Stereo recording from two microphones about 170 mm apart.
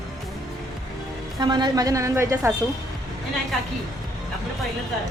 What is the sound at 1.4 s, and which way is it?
A woman's voice, 25° right (ahead or behind).